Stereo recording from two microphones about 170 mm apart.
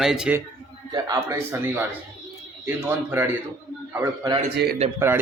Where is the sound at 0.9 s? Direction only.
20° right (ahead or behind).